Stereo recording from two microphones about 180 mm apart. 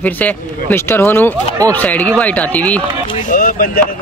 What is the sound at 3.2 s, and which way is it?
Speech, 50° left (ahead or behind).